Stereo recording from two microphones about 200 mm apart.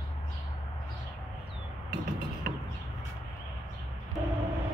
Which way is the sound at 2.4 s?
40° right (ahead or behind).